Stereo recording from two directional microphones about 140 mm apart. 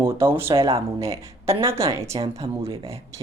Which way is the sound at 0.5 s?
40° right (ahead or behind).